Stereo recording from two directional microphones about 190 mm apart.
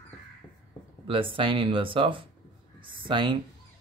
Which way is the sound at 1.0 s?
30° right (ahead or behind).